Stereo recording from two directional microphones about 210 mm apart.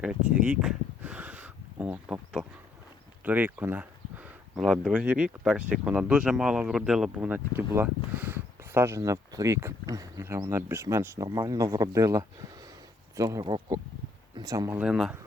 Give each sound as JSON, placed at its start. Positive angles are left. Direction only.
{"t": 0.0, "sound": "speech", "side_deg": -5}